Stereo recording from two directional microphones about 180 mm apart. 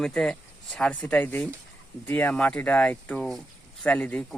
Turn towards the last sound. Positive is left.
turn(degrees=5)  # may be behind; listen again after turning